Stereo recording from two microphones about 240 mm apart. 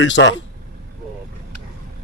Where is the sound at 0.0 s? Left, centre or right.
Left.